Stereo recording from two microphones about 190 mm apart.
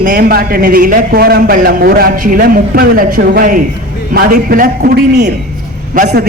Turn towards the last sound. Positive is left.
turn(degrees=-55)  # may be behind; listen again after turning